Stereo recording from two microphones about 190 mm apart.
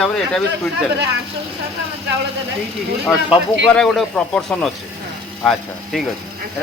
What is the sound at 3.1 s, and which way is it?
Speech, 5° left (ahead or behind).